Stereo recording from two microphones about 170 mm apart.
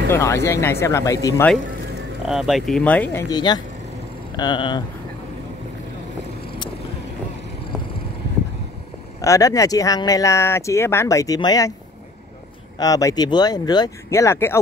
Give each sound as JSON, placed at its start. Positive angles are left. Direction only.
{"t": 0.1, "sound": "speech", "side_deg": 15}
{"t": 2.2, "sound": "speech", "side_deg": 0}
{"t": 3.3, "sound": "speech", "side_deg": 25}
{"t": 9.2, "sound": "speech", "side_deg": 20}
{"t": 12.7, "sound": "speech", "side_deg": 20}